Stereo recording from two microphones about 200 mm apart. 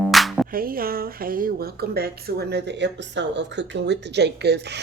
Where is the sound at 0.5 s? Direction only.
45° right (ahead or behind).